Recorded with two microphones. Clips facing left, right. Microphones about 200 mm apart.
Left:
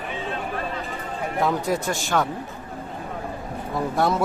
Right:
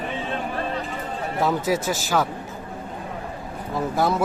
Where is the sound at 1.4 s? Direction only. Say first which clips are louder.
Right 1 dB; 5° right (ahead or behind).